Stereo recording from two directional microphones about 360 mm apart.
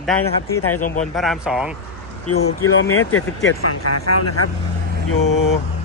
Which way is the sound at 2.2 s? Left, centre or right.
Left.